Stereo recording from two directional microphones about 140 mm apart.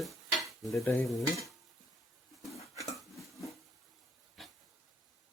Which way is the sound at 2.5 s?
20° left (ahead or behind).